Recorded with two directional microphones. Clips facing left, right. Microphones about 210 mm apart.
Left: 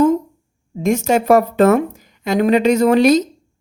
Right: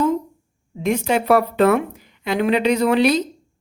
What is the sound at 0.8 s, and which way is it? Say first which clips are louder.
A woman's voice: left 4 dB; 45° left (ahead or behind).